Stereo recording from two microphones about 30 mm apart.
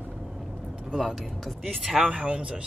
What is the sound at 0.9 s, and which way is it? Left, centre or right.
Speech, centre.